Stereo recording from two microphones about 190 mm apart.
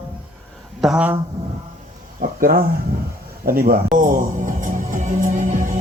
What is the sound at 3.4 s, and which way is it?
Music, 50° right (ahead or behind).